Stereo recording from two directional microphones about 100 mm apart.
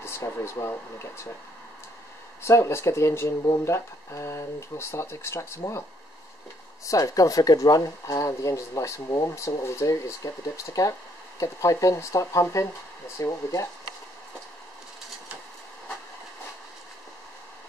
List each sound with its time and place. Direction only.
0.0 s speech: 30° left (ahead or behind)
2.4 s speech: 30° left (ahead or behind)
6.9 s speech: 35° left (ahead or behind)